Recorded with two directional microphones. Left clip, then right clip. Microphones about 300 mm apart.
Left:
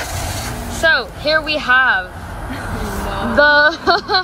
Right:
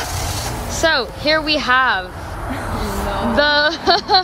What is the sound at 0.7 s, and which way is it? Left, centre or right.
Speech, centre.